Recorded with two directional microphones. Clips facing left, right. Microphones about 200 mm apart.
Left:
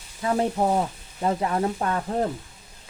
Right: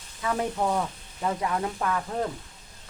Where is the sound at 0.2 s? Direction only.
30° left (ahead or behind).